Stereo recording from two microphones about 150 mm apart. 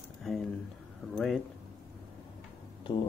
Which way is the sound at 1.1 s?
Centre (ahead or behind).